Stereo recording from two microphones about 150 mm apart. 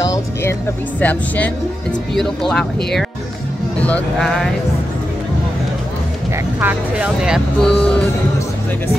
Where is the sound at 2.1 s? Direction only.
5° left (ahead or behind).